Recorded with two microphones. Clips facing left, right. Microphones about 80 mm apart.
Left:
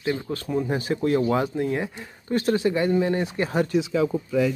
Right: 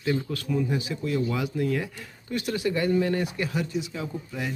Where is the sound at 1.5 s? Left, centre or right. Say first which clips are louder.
Left 2 dB; left.